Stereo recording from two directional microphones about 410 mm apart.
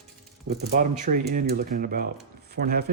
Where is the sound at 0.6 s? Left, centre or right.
Centre.